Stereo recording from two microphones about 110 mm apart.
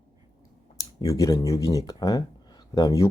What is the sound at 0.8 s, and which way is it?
Speech, 30° left (ahead or behind).